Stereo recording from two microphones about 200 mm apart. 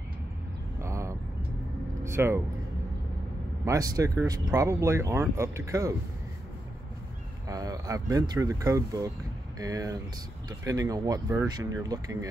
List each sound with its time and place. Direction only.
0.7 s vehicle: 15° right (ahead or behind)
2.0 s speech: 15° right (ahead or behind)
3.6 s speech: 15° right (ahead or behind)
7.4 s speech: 15° right (ahead or behind)